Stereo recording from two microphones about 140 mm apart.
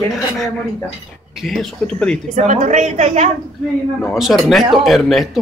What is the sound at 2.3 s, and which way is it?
Speech, 60° right (ahead or behind).